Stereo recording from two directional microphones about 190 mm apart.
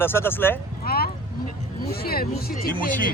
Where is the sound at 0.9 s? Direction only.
50° left (ahead or behind).